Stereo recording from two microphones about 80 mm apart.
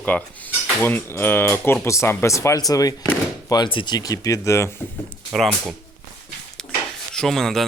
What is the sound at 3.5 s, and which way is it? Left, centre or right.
Speech, left.